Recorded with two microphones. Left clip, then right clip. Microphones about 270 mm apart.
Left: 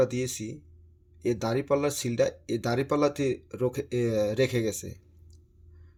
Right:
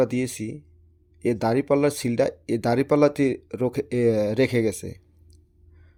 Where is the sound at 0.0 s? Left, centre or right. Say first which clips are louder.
Right 3 dB; right.